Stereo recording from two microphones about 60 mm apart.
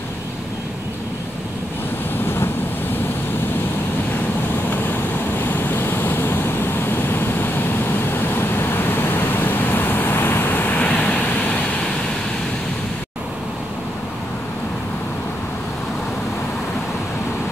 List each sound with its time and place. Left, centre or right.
2.2 s waves: left
4.6 s vehicle: left